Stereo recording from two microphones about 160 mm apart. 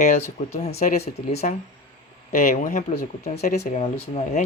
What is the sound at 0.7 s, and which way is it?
Speech, 75° left (ahead or behind).